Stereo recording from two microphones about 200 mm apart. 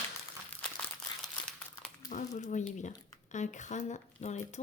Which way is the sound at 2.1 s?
35° left (ahead or behind).